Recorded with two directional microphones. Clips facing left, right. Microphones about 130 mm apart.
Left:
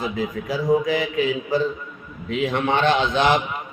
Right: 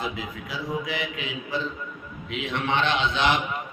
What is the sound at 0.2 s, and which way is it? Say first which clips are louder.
Mantra: left 9 dB; 40° left (ahead or behind).